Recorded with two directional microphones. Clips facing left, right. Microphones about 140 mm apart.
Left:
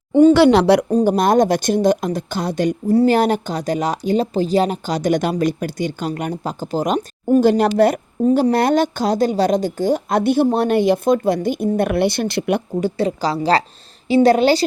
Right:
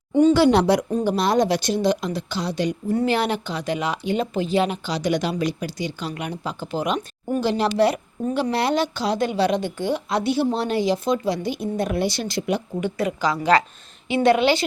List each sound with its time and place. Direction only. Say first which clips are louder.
0.1 s speech: left 5 dB; 60° left (ahead or behind)
0.9 s speech: left 6 dB; 45° left (ahead or behind)
2.9 s speech: left 8 dB; 40° left (ahead or behind); by 12.6 s 60° left (ahead or behind)
12.8 s a woman's voice: left 4 dB; 35° left (ahead or behind)